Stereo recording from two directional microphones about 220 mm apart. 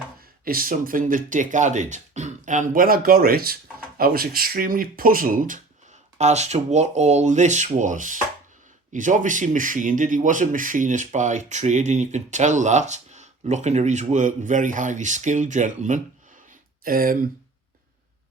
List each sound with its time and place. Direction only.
0.4 s a man's voice: 40° right (ahead or behind)